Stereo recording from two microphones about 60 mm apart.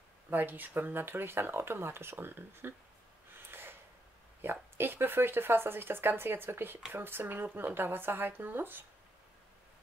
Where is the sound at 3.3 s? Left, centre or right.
Right.